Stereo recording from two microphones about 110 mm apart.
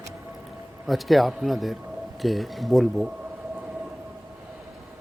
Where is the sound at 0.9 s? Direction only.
Centre (ahead or behind).